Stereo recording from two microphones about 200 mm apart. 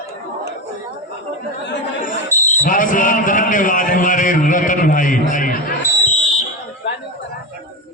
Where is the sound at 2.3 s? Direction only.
15° right (ahead or behind).